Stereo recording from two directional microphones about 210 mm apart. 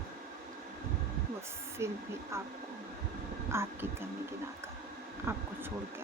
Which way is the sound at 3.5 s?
10° right (ahead or behind).